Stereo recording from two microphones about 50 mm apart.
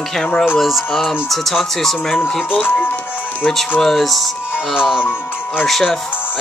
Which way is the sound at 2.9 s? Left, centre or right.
Left.